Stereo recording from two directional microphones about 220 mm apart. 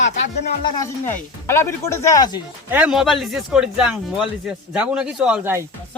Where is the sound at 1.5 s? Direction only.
10° left (ahead or behind).